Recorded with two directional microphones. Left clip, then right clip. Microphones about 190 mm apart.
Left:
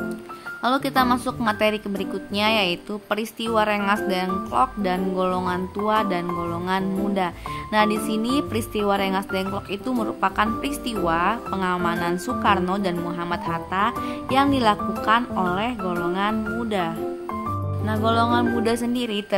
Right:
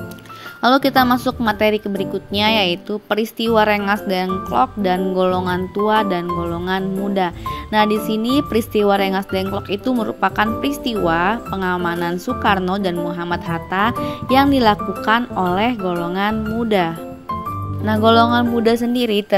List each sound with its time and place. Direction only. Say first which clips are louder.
0.6 s a woman's voice: right 7 dB; 25° right (ahead or behind)